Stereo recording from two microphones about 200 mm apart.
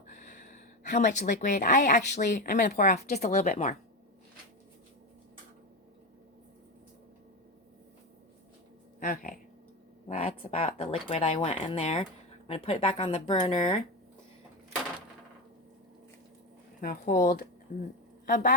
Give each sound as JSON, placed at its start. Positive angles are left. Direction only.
{"t": 0.1, "sound": "speech", "side_deg": 40}
{"t": 9.0, "sound": "dog", "side_deg": 40}
{"t": 10.1, "sound": "speech", "side_deg": 35}
{"t": 16.8, "sound": "speech", "side_deg": 45}